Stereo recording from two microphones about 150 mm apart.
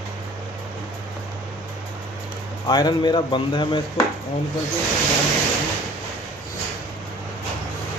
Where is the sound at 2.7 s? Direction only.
30° left (ahead or behind).